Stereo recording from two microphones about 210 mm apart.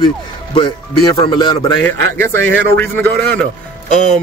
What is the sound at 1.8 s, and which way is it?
A man's voice, 10° left (ahead or behind).